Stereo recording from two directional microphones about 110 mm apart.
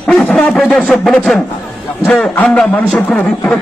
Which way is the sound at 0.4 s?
10° left (ahead or behind).